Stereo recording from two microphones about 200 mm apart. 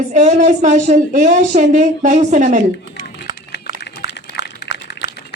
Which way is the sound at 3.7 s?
55° left (ahead or behind).